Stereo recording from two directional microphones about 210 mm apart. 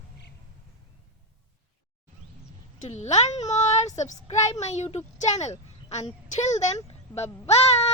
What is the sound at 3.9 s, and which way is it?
A woman's voice, 35° left (ahead or behind).